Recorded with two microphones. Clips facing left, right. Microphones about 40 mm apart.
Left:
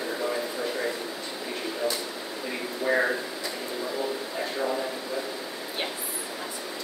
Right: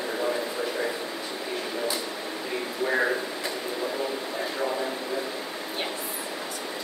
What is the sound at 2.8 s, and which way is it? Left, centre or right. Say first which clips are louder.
Speech: left 1 dB; centre.